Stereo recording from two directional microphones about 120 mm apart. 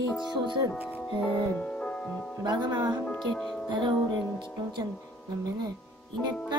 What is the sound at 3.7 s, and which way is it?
Music, 40° right (ahead or behind).